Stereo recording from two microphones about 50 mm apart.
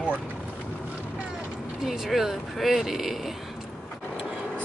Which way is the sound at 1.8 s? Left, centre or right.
Centre.